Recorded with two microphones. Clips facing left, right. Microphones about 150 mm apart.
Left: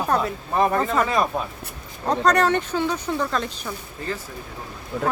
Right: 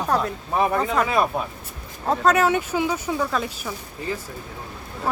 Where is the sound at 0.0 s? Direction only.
Centre (ahead or behind).